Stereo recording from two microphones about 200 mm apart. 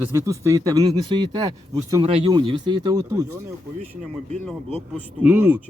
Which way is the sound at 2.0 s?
30° right (ahead or behind).